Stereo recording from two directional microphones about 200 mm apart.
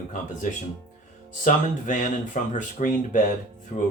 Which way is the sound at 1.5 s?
40° left (ahead or behind).